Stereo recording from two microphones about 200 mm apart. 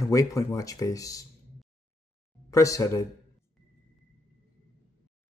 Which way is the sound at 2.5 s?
15° left (ahead or behind).